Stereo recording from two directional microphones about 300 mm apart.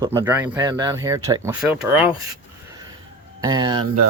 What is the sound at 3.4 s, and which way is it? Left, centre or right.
Speech, centre.